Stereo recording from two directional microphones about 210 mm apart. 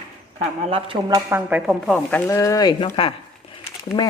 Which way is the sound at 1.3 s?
10° right (ahead or behind).